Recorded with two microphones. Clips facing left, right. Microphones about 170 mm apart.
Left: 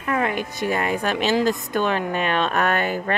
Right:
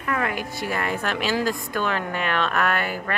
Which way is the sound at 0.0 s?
25° left (ahead or behind).